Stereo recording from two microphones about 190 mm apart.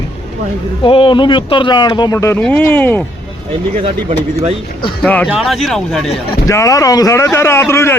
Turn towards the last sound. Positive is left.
turn(degrees=15)  # may be behind; listen again after turning